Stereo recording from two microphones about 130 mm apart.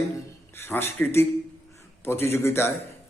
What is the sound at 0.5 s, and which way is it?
A man's voice, 15° left (ahead or behind).